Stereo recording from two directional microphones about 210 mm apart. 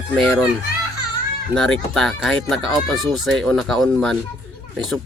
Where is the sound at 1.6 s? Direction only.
Centre (ahead or behind).